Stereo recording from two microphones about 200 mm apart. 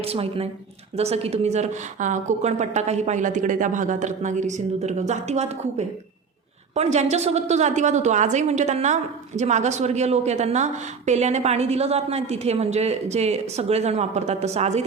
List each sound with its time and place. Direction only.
0.0 s a woman's voice: 30° right (ahead or behind)